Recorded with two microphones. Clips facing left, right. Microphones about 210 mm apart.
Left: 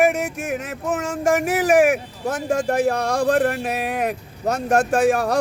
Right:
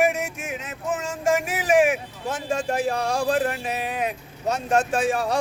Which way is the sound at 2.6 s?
60° left (ahead or behind).